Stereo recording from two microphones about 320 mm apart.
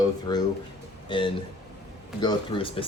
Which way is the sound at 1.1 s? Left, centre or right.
Centre.